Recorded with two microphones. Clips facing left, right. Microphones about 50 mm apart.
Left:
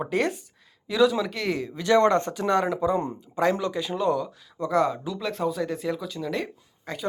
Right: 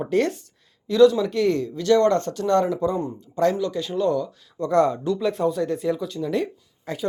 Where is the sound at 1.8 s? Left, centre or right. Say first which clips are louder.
Even; centre.